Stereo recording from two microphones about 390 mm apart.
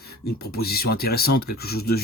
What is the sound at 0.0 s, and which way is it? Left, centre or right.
Speech, left.